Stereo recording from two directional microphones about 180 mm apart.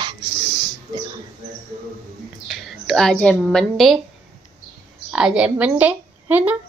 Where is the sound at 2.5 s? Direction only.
Centre (ahead or behind).